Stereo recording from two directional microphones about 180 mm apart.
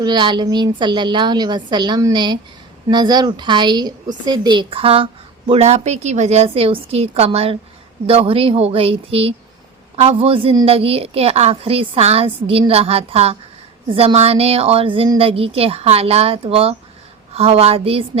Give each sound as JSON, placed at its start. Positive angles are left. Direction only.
{"t": 0.0, "sound": "a woman's voice", "side_deg": -25}